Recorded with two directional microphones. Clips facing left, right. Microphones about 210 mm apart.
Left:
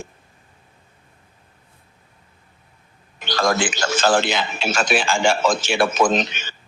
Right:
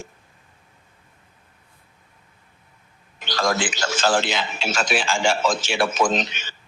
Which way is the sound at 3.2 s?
55° left (ahead or behind).